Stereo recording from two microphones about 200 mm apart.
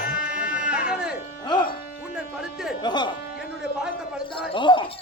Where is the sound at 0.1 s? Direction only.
5° right (ahead or behind).